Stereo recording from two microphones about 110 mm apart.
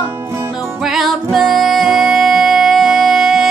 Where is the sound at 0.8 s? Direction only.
Centre (ahead or behind).